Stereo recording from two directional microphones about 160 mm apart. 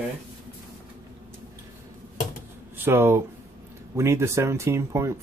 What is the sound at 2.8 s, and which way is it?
Speech, 15° right (ahead or behind).